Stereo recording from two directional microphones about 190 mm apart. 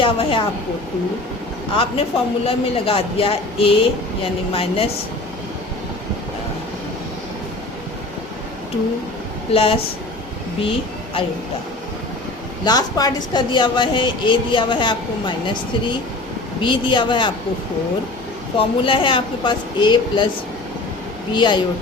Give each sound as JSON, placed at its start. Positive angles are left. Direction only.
{"t": 0.0, "sound": "a woman's voice", "side_deg": 30}
{"t": 1.7, "sound": "a woman's voice", "side_deg": 30}
{"t": 9.5, "sound": "a woman's voice", "side_deg": 30}
{"t": 12.6, "sound": "a woman's voice", "side_deg": 20}
{"t": 18.5, "sound": "a woman's voice", "side_deg": 25}
{"t": 21.3, "sound": "a woman's voice", "side_deg": 25}